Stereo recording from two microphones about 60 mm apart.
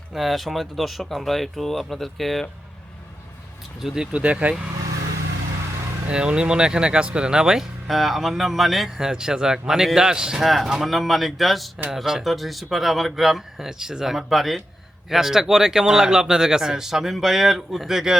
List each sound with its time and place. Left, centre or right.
0.1 s speech: centre
3.8 s speech: centre
6.1 s speech: centre